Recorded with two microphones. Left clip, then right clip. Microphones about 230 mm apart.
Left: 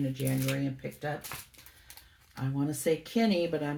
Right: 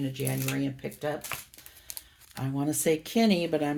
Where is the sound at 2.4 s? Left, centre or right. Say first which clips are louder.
Right 3 dB; right.